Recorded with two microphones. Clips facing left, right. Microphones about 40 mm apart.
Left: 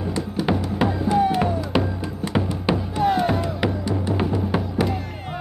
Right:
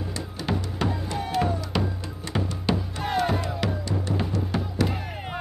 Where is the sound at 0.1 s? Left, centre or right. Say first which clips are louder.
Left 8 dB; centre.